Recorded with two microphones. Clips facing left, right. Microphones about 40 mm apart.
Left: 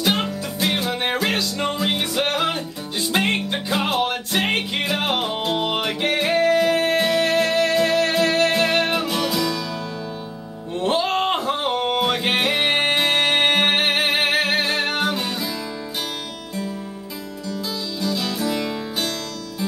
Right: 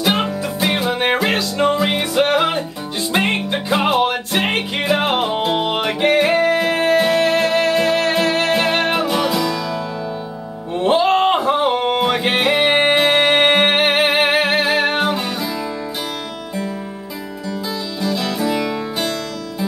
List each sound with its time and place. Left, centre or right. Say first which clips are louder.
0.0 s music: right 4 dB; centre
18.0 s music: right 4 dB; centre